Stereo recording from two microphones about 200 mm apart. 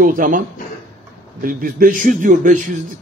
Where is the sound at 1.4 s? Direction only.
45° right (ahead or behind).